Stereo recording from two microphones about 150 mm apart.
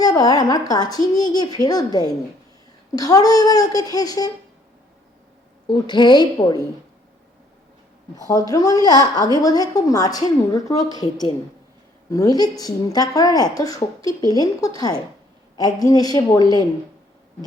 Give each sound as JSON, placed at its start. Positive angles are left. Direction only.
{"t": 0.0, "sound": "a woman's voice", "side_deg": 25}
{"t": 5.6, "sound": "a woman's voice", "side_deg": 30}
{"t": 8.1, "sound": "a woman's voice", "side_deg": 25}